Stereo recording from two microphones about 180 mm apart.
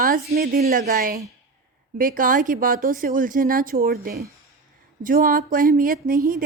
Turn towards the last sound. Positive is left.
turn(degrees=-50)  # may be behind; listen again after turning